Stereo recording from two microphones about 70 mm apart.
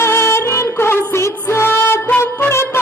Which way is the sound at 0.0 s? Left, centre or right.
Left.